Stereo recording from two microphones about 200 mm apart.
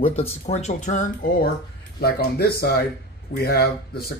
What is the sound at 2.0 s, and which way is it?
Speech, 50° left (ahead or behind).